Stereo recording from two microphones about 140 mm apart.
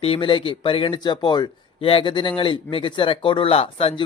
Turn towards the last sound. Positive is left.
turn(degrees=45)  # may be behind; listen again after turning